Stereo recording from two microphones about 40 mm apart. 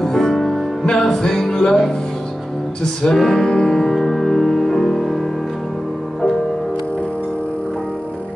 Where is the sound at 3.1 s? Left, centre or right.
Centre.